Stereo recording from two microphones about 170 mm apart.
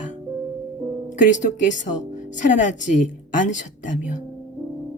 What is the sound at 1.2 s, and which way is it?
A woman's voice, 45° left (ahead or behind).